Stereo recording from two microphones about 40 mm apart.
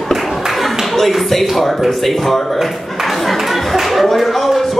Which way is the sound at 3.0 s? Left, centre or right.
Centre.